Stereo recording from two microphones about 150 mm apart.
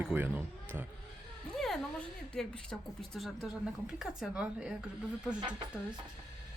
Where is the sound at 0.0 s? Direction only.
10° right (ahead or behind).